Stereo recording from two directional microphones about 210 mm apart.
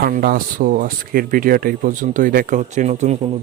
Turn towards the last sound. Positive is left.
turn(degrees=-35)  # may be behind; listen again after turning